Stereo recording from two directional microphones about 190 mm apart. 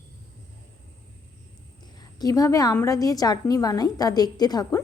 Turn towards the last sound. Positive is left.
turn(degrees=20)  # may be behind; listen again after turning